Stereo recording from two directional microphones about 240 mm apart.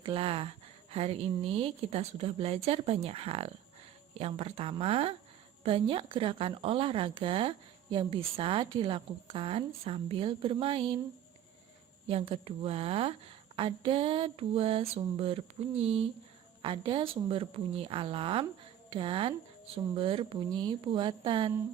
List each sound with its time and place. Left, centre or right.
0.0 s a woman's voice: right
12.0 s a woman's voice: right